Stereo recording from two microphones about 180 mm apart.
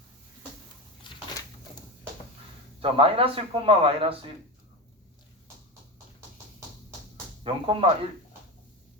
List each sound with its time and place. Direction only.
1.1 s a sound: 25° left (ahead or behind)
2.8 s speech: 30° right (ahead or behind)
7.4 s speech: 30° right (ahead or behind)